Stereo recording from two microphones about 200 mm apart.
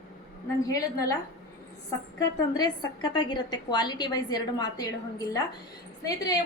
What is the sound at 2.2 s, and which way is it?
A woman's voice, 20° left (ahead or behind).